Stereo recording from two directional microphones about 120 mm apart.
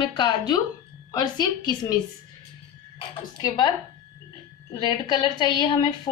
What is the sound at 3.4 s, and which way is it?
Speech, 35° left (ahead or behind).